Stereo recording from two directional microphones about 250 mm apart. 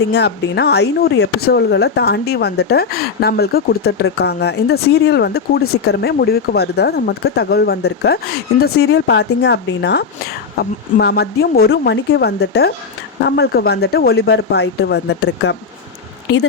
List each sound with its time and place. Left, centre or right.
0.1 s speech: left